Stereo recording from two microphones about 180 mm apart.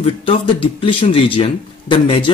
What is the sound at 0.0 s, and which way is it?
Speech, 30° left (ahead or behind).